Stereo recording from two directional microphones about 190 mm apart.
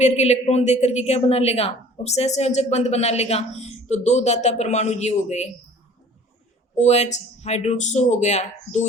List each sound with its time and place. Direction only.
0.0 s a woman's voice: 35° left (ahead or behind)
6.7 s a woman's voice: 35° left (ahead or behind)